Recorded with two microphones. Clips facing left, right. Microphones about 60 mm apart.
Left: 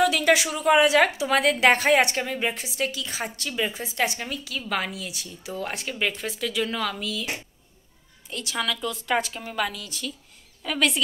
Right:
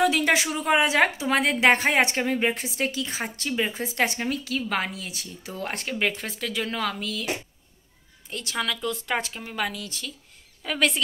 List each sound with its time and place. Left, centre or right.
0.0 s a woman's voice: right
3.8 s speech: right
8.3 s a woman's voice: right